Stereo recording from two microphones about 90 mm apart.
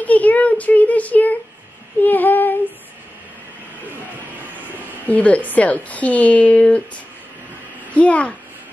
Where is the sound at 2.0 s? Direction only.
20° left (ahead or behind).